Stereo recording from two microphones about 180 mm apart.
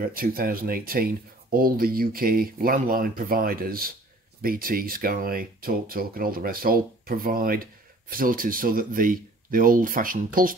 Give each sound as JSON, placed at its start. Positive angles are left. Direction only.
{"t": 0.0, "sound": "speech", "side_deg": -55}